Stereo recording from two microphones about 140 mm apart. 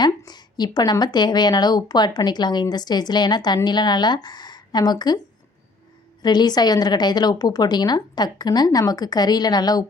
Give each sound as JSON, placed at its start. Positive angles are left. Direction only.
{"t": 0.2, "sound": "speech", "side_deg": 30}
{"t": 6.2, "sound": "speech", "side_deg": 30}